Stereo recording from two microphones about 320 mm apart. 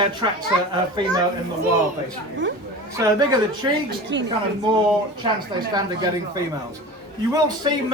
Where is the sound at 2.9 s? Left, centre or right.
Centre.